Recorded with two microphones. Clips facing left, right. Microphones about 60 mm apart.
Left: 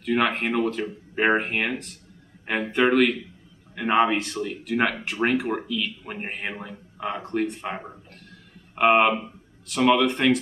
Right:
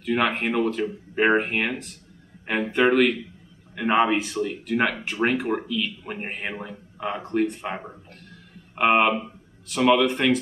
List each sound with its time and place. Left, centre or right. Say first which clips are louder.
0.0 s speech: even; centre